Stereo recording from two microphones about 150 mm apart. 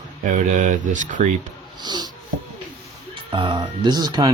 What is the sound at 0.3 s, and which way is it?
Speech, 60° right (ahead or behind).